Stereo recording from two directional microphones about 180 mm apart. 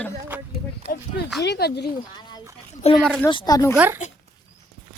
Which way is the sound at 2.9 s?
Centre (ahead or behind).